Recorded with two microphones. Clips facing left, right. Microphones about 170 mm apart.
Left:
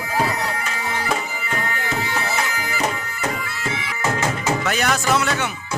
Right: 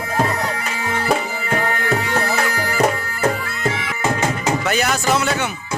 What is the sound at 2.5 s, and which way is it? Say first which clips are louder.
Bagpipes: right 6 dB; 40° right (ahead or behind).